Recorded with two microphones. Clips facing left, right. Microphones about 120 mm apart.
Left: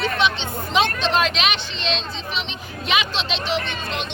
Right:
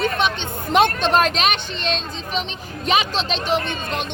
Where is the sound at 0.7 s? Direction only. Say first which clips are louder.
Right 4 dB; 50° right (ahead or behind).